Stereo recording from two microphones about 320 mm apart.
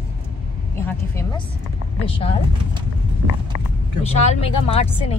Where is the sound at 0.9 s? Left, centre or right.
Centre.